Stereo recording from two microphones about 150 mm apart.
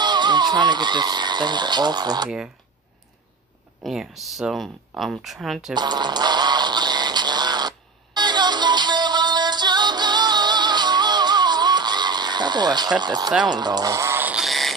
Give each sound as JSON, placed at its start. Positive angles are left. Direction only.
{"t": 0.0, "sound": "speech", "side_deg": -30}
{"t": 2.2, "sound": "speech", "side_deg": -5}
{"t": 3.8, "sound": "speech", "side_deg": 0}
{"t": 5.8, "sound": "a sound", "side_deg": -30}
{"t": 13.0, "sound": "speech", "side_deg": -30}
{"t": 13.4, "sound": "a sound", "side_deg": -30}